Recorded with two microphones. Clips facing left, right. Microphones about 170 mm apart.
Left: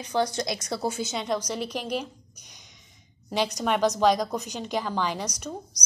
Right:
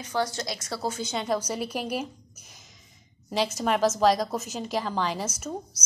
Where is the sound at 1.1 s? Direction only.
5° right (ahead or behind).